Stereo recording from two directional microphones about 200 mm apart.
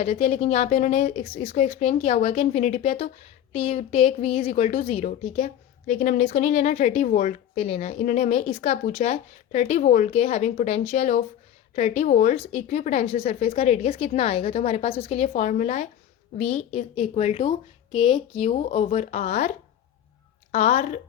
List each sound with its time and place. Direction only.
0.0 s a woman's voice: 30° left (ahead or behind)
20.5 s a woman's voice: 30° left (ahead or behind)